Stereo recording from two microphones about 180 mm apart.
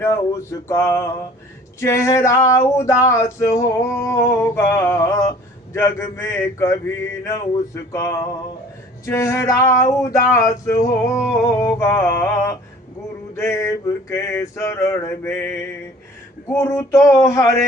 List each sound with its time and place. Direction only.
0.0 s singing: 15° left (ahead or behind)